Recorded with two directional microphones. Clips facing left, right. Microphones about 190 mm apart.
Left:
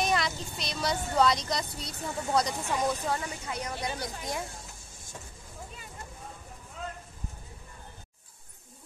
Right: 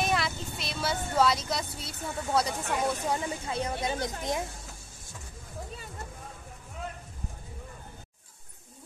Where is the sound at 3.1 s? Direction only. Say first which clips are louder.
Right 3 dB; 25° right (ahead or behind).